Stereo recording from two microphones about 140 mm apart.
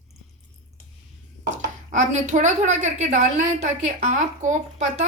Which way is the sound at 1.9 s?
60° right (ahead or behind).